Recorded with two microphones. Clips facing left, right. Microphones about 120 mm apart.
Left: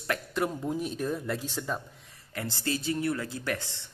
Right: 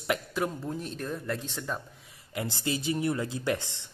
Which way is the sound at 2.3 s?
15° right (ahead or behind).